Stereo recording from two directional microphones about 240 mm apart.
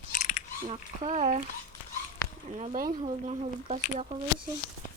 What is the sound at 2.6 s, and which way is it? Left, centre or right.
Speech, right.